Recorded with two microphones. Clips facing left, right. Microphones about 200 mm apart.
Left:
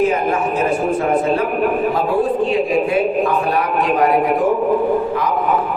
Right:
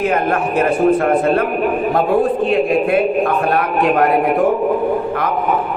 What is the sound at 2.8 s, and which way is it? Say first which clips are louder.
A man's voice: right 2 dB; 55° right (ahead or behind).